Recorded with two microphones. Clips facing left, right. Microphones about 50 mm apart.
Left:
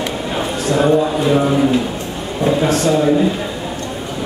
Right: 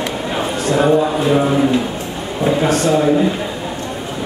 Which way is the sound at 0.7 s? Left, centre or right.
Centre.